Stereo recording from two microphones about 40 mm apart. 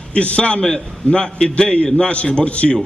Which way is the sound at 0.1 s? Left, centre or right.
Left.